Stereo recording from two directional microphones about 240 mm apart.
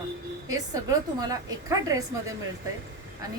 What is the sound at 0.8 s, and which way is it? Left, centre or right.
A woman's voice, centre.